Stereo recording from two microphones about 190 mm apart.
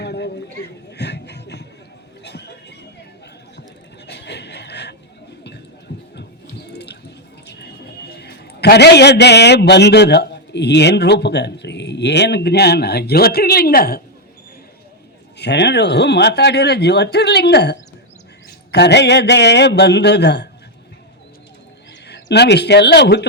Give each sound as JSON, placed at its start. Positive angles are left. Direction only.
{"t": 0.0, "sound": "a sound", "side_deg": 60}
{"t": 4.0, "sound": "a sound", "side_deg": 60}
{"t": 5.9, "sound": "heart murmur", "side_deg": 65}
{"t": 6.7, "sound": "water", "side_deg": 60}
{"t": 7.4, "sound": "a man's voice", "side_deg": 60}
{"t": 15.4, "sound": "speech", "side_deg": 60}
{"t": 22.0, "sound": "speech", "side_deg": 60}